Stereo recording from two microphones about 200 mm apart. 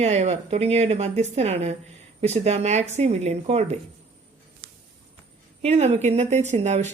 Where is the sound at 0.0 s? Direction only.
35° right (ahead or behind).